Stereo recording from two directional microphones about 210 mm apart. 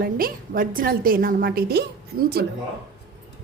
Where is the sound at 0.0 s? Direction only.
45° right (ahead or behind).